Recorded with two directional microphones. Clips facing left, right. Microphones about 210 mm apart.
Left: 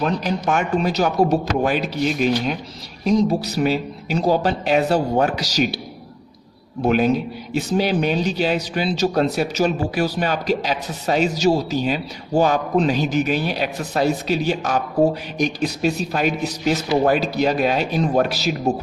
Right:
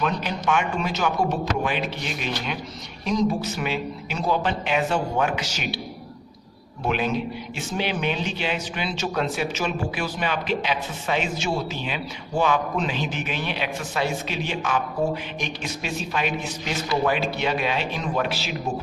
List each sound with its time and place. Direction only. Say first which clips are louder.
0.0 s a man's voice: left 4 dB; 40° left (ahead or behind)
6.8 s a man's voice: left 7 dB; 40° left (ahead or behind)